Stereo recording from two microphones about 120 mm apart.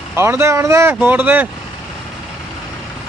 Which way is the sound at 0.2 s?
20° right (ahead or behind).